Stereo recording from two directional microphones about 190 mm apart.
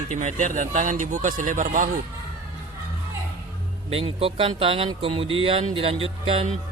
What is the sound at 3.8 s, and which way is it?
Speech, 30° right (ahead or behind).